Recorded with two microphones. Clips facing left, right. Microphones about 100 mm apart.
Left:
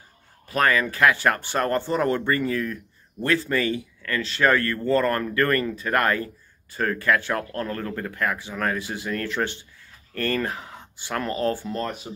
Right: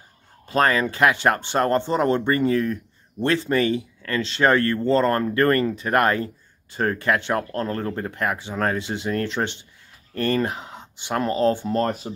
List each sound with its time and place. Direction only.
0.5 s speech: 30° right (ahead or behind)
11.7 s speech: 40° right (ahead or behind)